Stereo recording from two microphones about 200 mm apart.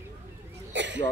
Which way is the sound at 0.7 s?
65° right (ahead or behind).